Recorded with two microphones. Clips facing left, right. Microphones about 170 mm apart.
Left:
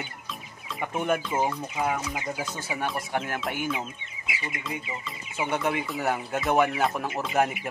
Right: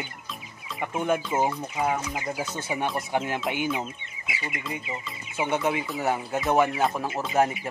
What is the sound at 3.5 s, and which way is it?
Speech, 20° right (ahead or behind).